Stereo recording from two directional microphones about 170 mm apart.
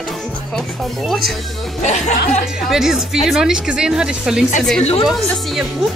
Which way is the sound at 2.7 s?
Centre (ahead or behind).